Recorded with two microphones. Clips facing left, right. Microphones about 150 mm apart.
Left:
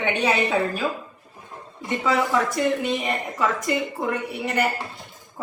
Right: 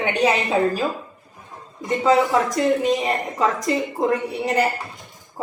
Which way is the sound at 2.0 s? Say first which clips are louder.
Right 4 dB; 40° right (ahead or behind).